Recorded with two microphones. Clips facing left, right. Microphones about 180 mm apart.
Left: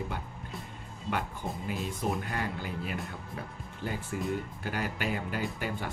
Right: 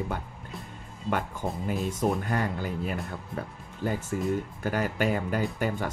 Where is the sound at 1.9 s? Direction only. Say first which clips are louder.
Right 6 dB; 45° right (ahead or behind).